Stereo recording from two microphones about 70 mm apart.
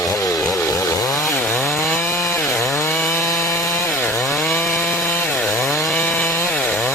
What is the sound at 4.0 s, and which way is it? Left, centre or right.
Chainsaw, left.